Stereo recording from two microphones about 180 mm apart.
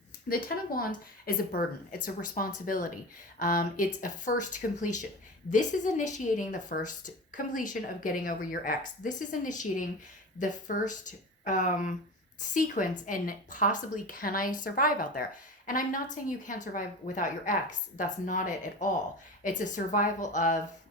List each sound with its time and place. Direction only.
0.3 s a woman's voice: 50° left (ahead or behind)